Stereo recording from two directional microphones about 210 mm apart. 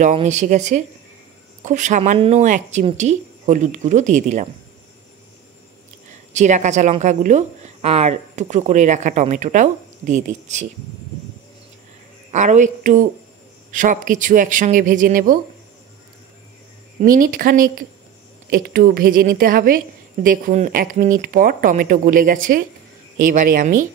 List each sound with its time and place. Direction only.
0.0 s speech: 35° right (ahead or behind)
6.3 s speech: 35° right (ahead or behind)
12.3 s speech: 35° right (ahead or behind)
17.0 s a woman's voice: 40° right (ahead or behind)